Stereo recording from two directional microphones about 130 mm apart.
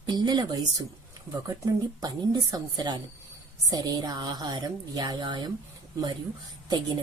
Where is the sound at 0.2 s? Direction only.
30° right (ahead or behind).